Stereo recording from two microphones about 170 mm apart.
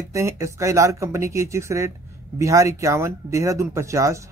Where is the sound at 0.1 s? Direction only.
15° right (ahead or behind).